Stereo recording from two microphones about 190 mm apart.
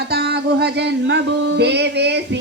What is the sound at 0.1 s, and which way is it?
Music, 55° right (ahead or behind).